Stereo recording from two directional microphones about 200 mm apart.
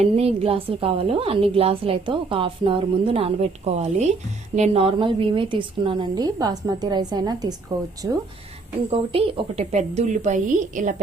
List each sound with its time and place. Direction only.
0.0 s a woman's voice: 30° right (ahead or behind)
8.9 s a woman's voice: 30° right (ahead or behind)